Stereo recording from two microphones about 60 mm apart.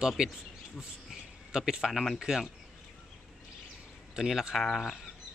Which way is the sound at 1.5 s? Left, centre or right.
Centre.